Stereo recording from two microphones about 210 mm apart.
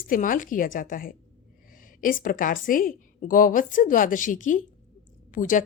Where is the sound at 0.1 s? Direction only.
40° left (ahead or behind).